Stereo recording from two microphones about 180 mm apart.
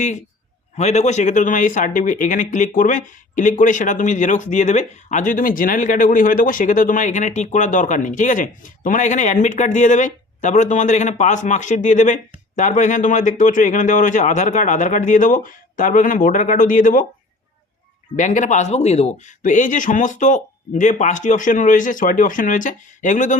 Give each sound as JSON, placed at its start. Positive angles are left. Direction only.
{"t": 0.0, "sound": "speech", "side_deg": 45}
{"t": 18.2, "sound": "speech", "side_deg": 45}